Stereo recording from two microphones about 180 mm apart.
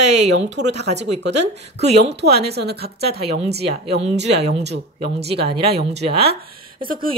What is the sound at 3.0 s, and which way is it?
Speech, 35° right (ahead or behind).